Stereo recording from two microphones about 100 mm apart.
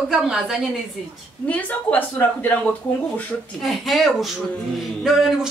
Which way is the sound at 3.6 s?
Centre (ahead or behind).